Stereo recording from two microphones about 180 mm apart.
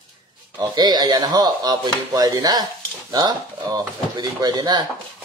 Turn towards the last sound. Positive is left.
turn(degrees=-25)  # may be behind; listen again after turning